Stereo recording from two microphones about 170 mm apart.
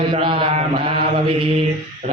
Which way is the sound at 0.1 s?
30° right (ahead or behind).